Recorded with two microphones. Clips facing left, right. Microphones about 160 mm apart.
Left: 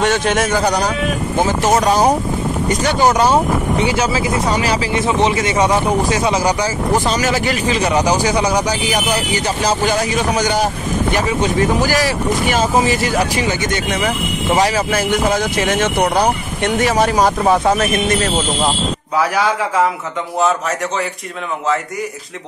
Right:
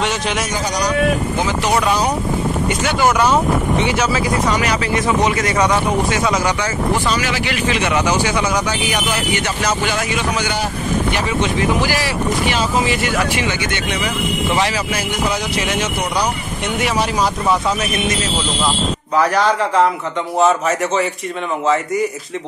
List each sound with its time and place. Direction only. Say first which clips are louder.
0.0 s speech: left 5 dB; 50° left (ahead or behind)
1.4 s speech: left 6 dB; 45° left (ahead or behind)
19.1 s a man's voice: right 2 dB; 5° left (ahead or behind)